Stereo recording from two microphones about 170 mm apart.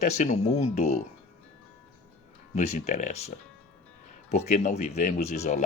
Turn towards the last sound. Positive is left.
turn(degrees=40)  # may be behind; listen again after turning